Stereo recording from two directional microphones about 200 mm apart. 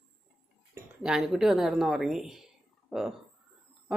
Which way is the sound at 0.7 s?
10° right (ahead or behind).